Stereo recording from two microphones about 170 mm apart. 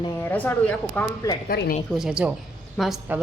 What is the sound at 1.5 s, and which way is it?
Speech, 65° left (ahead or behind).